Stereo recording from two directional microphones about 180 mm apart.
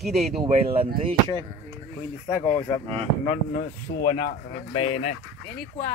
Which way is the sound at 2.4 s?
20° left (ahead or behind).